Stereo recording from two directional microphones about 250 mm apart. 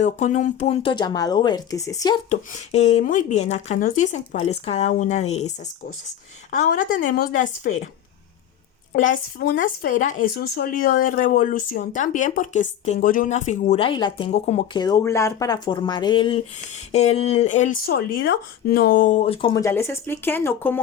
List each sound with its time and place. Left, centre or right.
0.2 s speech: left; by 2.1 s centre
2.3 s speech: left
9.0 s speech: left; by 20.8 s centre